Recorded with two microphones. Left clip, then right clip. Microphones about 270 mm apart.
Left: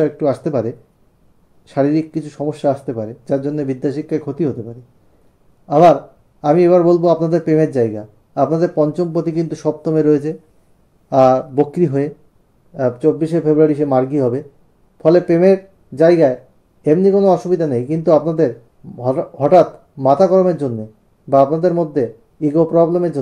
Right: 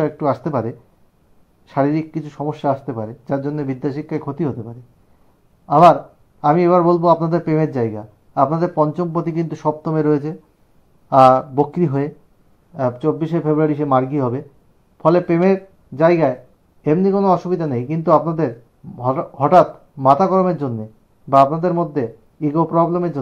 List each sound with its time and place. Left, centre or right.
0.0 s a man's voice: centre
6.4 s a man's voice: centre